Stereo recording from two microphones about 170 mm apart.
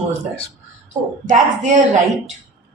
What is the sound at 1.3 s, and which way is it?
Speech, 45° right (ahead or behind).